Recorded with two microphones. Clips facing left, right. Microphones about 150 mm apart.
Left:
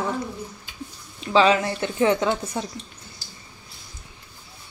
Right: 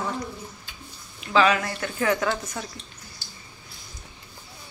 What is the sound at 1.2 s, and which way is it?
A woman's voice, 30° left (ahead or behind).